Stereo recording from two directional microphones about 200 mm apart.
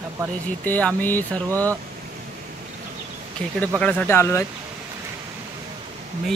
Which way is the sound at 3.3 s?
5° left (ahead or behind).